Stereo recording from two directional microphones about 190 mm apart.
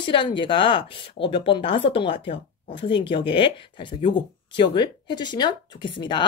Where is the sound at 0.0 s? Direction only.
25° left (ahead or behind).